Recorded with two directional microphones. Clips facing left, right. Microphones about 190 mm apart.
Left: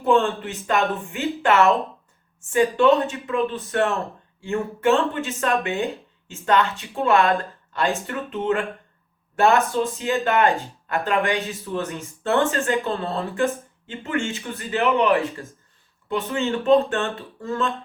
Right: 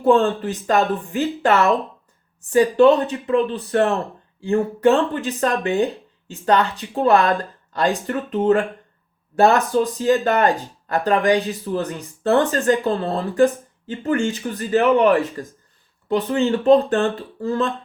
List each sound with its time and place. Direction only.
0.0 s speech: 35° right (ahead or behind)